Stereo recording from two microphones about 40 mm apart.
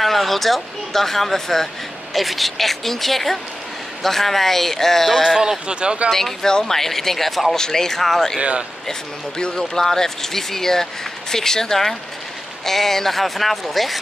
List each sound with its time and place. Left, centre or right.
0.0 s speech: centre
5.2 s speech: centre
5.7 s speech: right
6.0 s speech: centre
7.5 s speech: centre
8.4 s speech: right
9.6 s speech: centre